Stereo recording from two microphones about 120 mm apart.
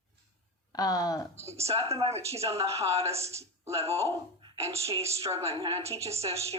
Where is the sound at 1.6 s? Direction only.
25° right (ahead or behind).